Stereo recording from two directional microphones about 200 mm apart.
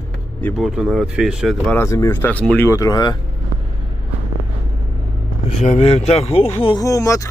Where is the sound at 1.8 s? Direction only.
15° left (ahead or behind).